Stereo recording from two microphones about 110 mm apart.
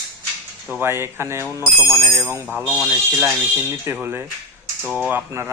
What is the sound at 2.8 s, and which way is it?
Speech, 20° right (ahead or behind).